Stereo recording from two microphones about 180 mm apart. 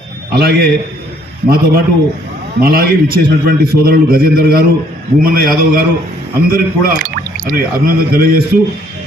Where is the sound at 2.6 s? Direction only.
55° right (ahead or behind).